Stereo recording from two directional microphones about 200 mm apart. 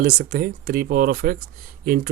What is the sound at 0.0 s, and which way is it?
Speech, 45° right (ahead or behind).